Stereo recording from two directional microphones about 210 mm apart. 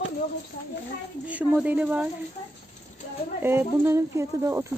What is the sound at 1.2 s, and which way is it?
Speech, 5° right (ahead or behind).